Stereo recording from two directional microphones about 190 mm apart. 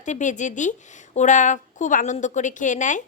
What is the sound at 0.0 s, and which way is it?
A woman's voice, 40° left (ahead or behind).